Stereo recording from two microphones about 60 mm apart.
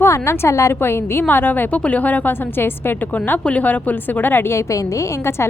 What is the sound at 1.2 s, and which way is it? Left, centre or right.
Speech, left.